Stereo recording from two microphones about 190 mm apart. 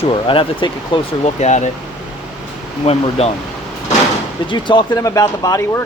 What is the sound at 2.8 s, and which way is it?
Speech, 35° left (ahead or behind).